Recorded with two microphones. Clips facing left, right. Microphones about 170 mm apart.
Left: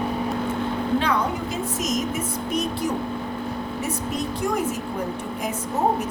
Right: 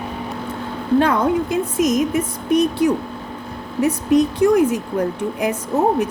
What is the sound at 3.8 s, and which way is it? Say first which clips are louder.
Speech: right 15 dB; 65° right (ahead or behind).